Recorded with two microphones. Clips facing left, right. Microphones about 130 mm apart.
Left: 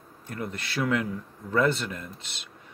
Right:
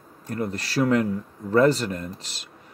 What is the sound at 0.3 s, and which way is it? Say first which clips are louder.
Speech: right 6 dB; 40° right (ahead or behind).